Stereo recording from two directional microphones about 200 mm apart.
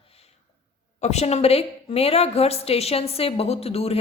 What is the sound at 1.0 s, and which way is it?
A woman's voice, 35° left (ahead or behind).